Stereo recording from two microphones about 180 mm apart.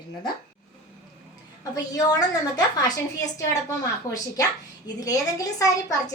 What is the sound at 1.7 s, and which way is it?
A child's voice, 20° left (ahead or behind).